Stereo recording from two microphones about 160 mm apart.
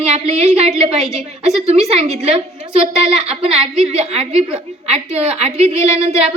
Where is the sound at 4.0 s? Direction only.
40° right (ahead or behind).